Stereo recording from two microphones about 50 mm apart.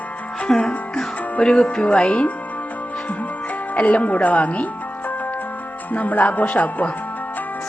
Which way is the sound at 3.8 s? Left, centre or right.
Left.